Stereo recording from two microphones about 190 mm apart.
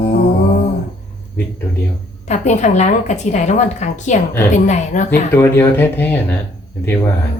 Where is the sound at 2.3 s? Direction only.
40° left (ahead or behind).